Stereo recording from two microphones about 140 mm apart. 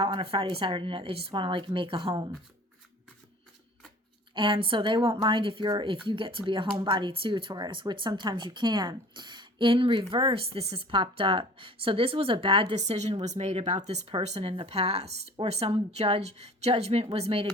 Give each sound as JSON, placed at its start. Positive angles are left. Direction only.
{"t": 0.0, "sound": "a woman's voice", "side_deg": -40}
{"t": 4.4, "sound": "a woman's voice", "side_deg": -40}
{"t": 12.8, "sound": "speech", "side_deg": -55}